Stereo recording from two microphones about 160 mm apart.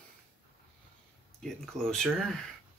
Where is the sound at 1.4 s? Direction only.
5° left (ahead or behind).